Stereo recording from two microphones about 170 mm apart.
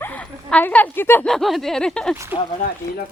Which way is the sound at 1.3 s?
Centre (ahead or behind).